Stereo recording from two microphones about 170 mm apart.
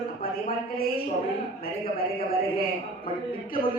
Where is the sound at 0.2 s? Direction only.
60° left (ahead or behind).